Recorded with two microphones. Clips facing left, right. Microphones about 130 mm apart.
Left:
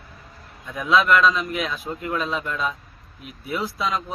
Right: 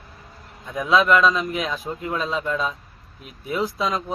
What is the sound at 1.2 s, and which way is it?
Speech, 35° right (ahead or behind).